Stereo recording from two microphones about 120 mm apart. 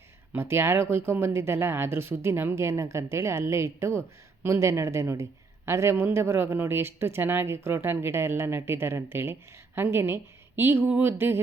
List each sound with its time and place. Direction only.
0.3 s speech: 20° right (ahead or behind)